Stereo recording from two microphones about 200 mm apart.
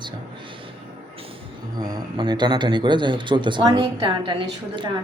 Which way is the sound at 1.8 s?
20° right (ahead or behind).